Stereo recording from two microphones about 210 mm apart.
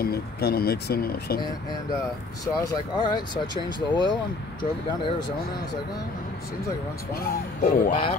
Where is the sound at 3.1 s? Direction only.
20° left (ahead or behind).